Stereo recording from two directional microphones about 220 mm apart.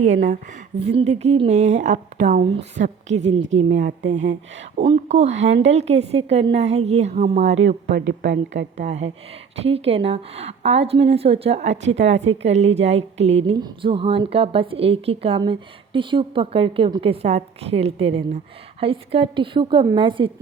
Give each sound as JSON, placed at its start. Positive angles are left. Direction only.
{"t": 0.0, "sound": "a woman's voice", "side_deg": -30}
{"t": 8.0, "sound": "speech", "side_deg": -50}
{"t": 8.5, "sound": "a woman's voice", "side_deg": -30}